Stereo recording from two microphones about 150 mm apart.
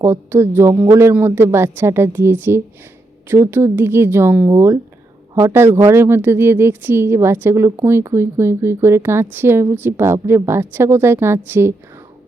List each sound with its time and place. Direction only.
0.0 s a woman's voice: 15° right (ahead or behind)